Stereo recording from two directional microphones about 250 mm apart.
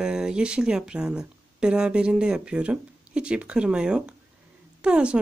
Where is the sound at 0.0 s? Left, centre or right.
Centre.